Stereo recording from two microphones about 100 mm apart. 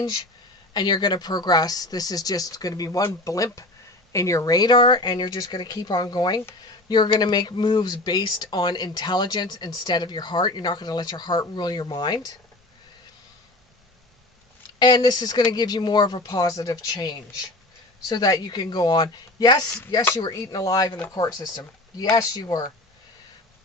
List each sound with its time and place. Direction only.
0.7 s speech: 45° left (ahead or behind)
14.8 s speech: 45° left (ahead or behind)